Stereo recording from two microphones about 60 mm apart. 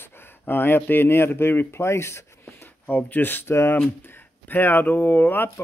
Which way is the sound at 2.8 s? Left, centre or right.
Left.